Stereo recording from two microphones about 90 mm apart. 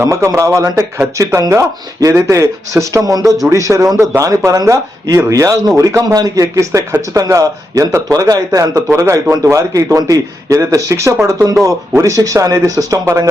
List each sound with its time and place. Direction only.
0.0 s speech: 35° right (ahead or behind)